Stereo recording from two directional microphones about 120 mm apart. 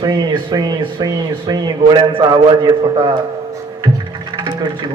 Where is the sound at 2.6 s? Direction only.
30° right (ahead or behind).